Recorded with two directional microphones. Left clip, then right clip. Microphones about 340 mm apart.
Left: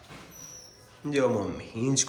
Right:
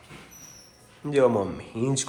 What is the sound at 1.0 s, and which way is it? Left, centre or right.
A man's voice, centre.